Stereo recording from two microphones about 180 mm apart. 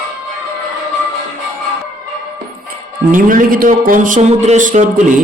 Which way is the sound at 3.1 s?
50° right (ahead or behind).